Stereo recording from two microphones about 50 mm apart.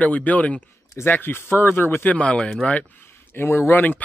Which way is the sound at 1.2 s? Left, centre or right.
Left.